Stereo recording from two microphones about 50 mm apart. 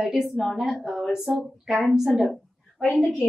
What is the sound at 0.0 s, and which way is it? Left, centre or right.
Speech, centre.